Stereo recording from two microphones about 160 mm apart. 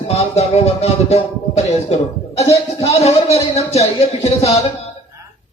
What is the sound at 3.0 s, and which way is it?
Music, 40° left (ahead or behind).